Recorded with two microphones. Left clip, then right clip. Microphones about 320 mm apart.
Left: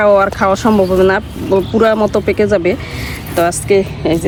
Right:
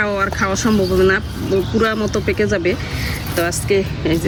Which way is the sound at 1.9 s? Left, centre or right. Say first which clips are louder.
Left 7 dB; left.